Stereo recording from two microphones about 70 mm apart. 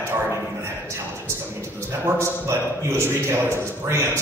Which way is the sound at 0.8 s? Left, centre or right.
Right.